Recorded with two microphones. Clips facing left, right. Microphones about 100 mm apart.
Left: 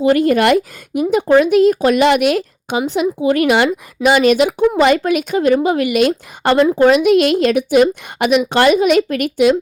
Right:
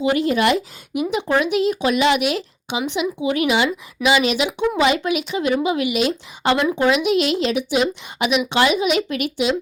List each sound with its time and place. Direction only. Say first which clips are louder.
0.0 s speech: left 6 dB; 50° left (ahead or behind)
6.6 s speech: left 8 dB; 35° left (ahead or behind)
6.8 s speech: left 6 dB; 50° left (ahead or behind)